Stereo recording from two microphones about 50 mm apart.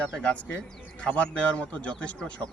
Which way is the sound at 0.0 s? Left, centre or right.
Left.